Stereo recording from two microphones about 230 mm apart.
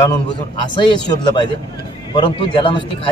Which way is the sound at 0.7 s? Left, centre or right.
Centre.